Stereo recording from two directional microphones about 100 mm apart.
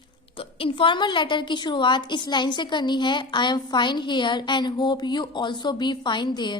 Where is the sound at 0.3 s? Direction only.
65° left (ahead or behind).